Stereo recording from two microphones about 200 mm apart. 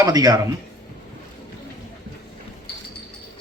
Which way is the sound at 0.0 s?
20° right (ahead or behind).